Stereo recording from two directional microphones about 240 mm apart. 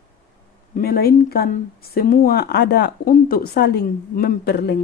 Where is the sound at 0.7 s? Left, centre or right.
Left.